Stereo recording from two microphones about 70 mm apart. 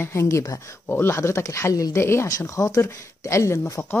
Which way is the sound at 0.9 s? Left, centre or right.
Left.